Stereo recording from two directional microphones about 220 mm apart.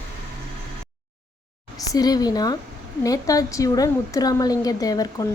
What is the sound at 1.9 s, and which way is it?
A woman's voice, 15° left (ahead or behind).